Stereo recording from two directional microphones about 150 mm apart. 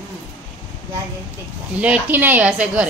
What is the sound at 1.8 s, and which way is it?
A woman's voice, 10° right (ahead or behind).